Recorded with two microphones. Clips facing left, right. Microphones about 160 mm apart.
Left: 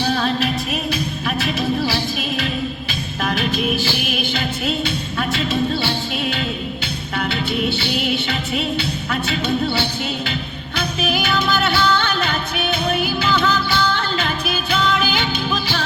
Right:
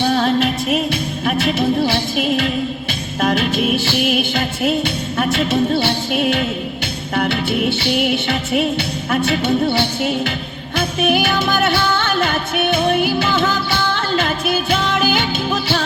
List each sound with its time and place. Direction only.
1.2 s music: 55° right (ahead or behind)
4.1 s music: 50° right (ahead or behind)
9.0 s music: 50° right (ahead or behind)